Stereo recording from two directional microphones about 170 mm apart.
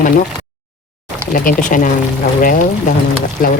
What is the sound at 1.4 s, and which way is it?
Speech, 50° left (ahead or behind).